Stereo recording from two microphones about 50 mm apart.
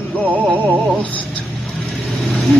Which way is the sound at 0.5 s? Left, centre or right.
Right.